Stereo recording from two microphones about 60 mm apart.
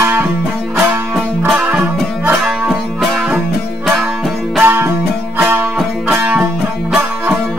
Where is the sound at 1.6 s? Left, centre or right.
Right.